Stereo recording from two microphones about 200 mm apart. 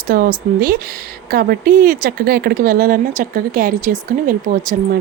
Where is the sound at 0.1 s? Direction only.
45° right (ahead or behind).